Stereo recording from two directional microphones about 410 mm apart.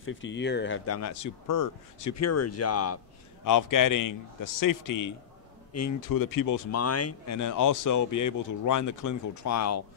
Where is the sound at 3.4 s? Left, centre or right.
Left.